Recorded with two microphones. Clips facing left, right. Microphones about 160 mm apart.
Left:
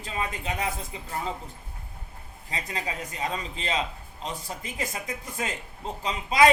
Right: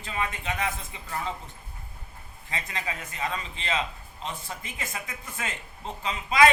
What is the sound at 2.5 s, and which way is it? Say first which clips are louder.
A man's voice: left 1 dB; 35° left (ahead or behind).